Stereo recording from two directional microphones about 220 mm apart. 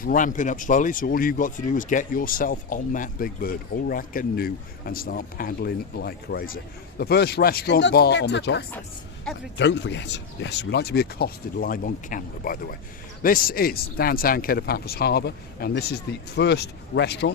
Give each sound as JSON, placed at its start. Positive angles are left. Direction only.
{"t": 0.0, "sound": "speech", "side_deg": 40}